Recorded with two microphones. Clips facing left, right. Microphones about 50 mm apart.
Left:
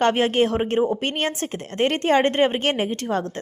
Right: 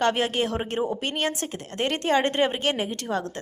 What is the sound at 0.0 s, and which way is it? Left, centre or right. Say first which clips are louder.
A woman's voice: left 5 dB; left.